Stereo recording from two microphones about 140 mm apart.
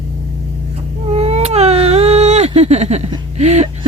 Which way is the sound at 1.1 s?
45° right (ahead or behind).